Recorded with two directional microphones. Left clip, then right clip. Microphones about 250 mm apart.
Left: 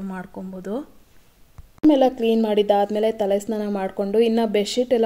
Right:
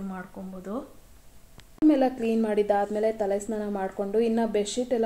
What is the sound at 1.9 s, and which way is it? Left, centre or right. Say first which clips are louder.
A woman's voice: left 6 dB; left.